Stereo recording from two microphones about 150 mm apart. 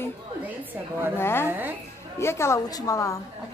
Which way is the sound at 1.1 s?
15° left (ahead or behind).